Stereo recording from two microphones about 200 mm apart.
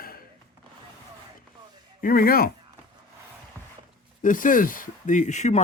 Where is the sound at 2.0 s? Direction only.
45° left (ahead or behind).